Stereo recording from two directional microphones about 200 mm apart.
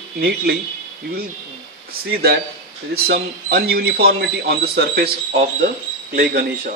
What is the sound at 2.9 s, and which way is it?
A man's voice, 50° right (ahead or behind).